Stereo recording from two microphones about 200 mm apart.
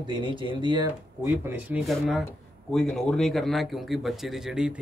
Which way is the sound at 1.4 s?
10° right (ahead or behind).